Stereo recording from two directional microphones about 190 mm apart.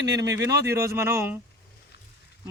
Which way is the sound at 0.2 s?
20° right (ahead or behind).